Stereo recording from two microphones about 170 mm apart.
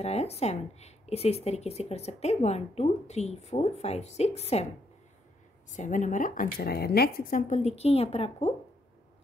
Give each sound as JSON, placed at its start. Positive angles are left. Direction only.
{"t": 0.0, "sound": "speech", "side_deg": 40}
{"t": 5.7, "sound": "speech", "side_deg": 50}